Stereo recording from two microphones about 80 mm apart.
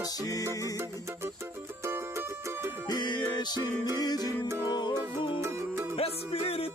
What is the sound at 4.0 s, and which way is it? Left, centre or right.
Music, left.